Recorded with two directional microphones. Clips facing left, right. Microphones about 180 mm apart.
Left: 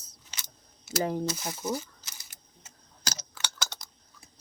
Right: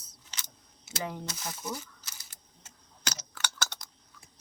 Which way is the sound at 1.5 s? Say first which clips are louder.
Left 6 dB; 20° left (ahead or behind).